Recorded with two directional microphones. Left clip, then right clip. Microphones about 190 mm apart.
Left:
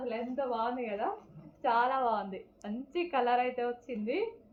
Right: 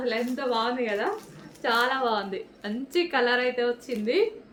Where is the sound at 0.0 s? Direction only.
25° right (ahead or behind).